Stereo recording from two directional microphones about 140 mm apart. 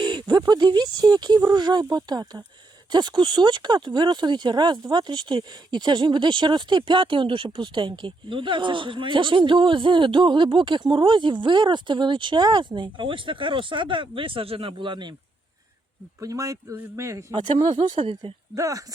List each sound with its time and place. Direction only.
0.0 s speech: 30° right (ahead or behind)
16.2 s speech: 25° right (ahead or behind)
17.4 s speech: 35° right (ahead or behind)
18.5 s speech: 25° right (ahead or behind)